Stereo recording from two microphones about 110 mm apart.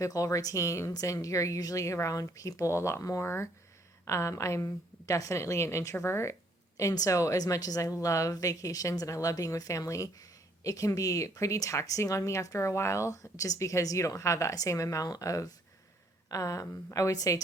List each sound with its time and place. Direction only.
0.0 s speech: 30° left (ahead or behind)